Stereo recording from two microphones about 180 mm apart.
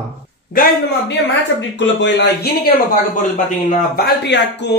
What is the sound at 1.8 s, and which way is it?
Speech, 80° left.